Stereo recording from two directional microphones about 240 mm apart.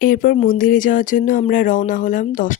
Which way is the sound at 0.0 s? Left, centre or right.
Left.